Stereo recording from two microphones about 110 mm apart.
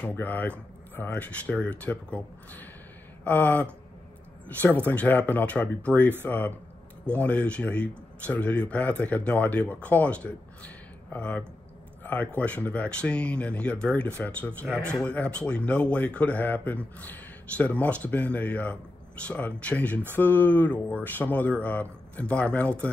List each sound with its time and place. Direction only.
0.0 s speech: 15° left (ahead or behind)